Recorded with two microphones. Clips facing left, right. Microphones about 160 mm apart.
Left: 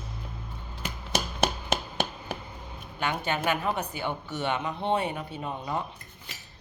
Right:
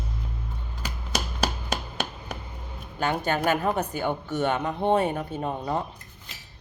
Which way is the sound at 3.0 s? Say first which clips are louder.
Right 4 dB; 45° right (ahead or behind).